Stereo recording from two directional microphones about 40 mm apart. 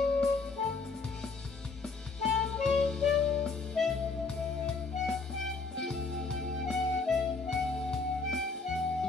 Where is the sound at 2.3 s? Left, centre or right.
Centre.